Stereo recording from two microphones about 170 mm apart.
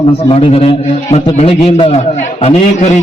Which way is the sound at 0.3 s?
35° left (ahead or behind).